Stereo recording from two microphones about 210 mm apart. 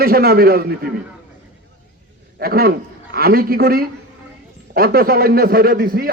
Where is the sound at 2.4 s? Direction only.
45° right (ahead or behind).